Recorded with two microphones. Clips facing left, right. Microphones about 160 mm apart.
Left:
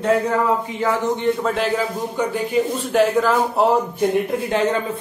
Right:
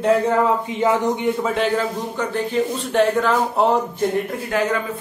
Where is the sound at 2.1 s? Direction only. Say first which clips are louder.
Left 2 dB; 10° left (ahead or behind).